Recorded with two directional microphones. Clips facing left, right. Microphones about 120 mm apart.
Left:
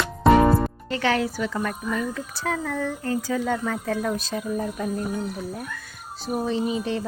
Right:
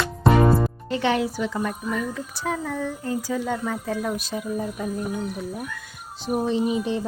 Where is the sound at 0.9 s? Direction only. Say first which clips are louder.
Right 1 dB; 20° right (ahead or behind).